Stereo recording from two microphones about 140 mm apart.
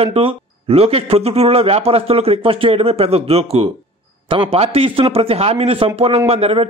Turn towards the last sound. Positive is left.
turn(degrees=-45)  # may be behind; listen again after turning